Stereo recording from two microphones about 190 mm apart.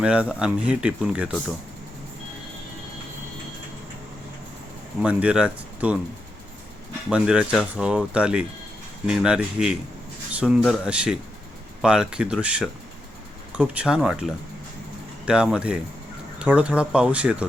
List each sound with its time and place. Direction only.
0.0 s speech: 5° right (ahead or behind)
5.0 s speech: 5° right (ahead or behind)
7.1 s speech: 5° right (ahead or behind)